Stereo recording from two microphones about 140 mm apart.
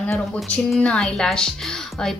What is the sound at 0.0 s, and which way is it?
A woman's voice, 10° left (ahead or behind).